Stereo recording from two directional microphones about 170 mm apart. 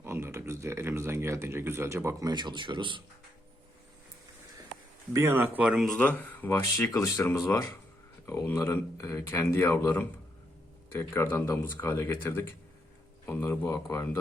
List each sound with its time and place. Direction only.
0.0 s speech: 15° right (ahead or behind)
5.1 s speech: 15° right (ahead or behind); by 14.2 s 15° left (ahead or behind)